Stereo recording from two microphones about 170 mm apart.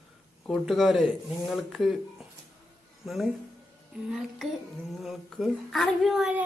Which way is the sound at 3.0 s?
Centre (ahead or behind).